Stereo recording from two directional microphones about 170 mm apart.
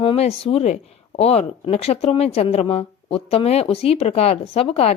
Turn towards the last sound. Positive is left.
turn(degrees=35)  # may be behind; listen again after turning